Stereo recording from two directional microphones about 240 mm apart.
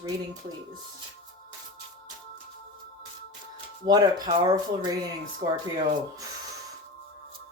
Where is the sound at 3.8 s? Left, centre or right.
Centre.